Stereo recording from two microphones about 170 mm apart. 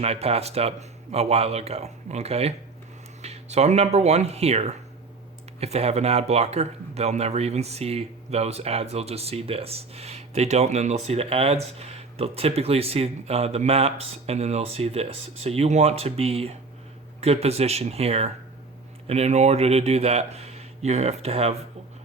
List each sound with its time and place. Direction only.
0.0 s speech: 35° right (ahead or behind)